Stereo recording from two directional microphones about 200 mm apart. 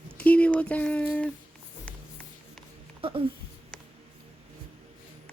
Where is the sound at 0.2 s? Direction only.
5° left (ahead or behind).